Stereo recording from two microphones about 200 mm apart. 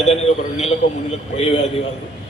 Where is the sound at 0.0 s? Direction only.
30° left (ahead or behind).